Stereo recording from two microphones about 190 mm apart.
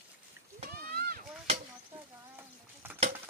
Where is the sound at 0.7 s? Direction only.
50° right (ahead or behind).